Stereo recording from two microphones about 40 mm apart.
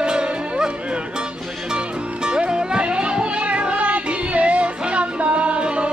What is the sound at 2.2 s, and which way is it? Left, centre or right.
Music, right.